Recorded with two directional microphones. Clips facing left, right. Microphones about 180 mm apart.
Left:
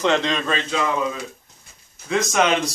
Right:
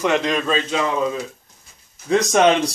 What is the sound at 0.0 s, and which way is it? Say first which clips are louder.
Speech: right 1 dB; 10° right (ahead or behind).